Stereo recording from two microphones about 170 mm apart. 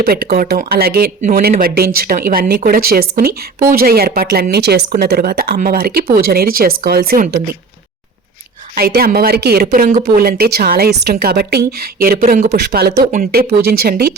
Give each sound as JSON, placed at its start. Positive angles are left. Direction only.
{"t": 0.0, "sound": "a woman's voice", "side_deg": -65}
{"t": 8.7, "sound": "a woman's voice", "side_deg": -65}
{"t": 9.6, "sound": "a woman's voice", "side_deg": -50}
{"t": 12.5, "sound": "speech", "side_deg": -70}
{"t": 13.1, "sound": "speech", "side_deg": -50}
{"t": 13.5, "sound": "a woman's voice", "side_deg": -65}